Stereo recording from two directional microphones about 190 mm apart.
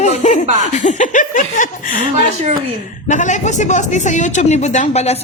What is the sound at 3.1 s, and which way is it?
Speech, 40° left (ahead or behind).